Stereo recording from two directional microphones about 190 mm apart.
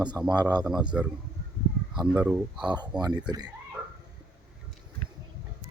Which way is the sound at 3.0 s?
20° right (ahead or behind).